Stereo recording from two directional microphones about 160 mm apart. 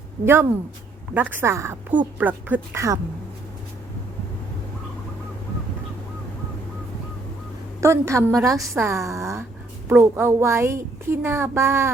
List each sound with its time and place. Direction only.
1.1 s a woman's voice: 10° right (ahead or behind)
7.8 s a woman's voice: 20° right (ahead or behind)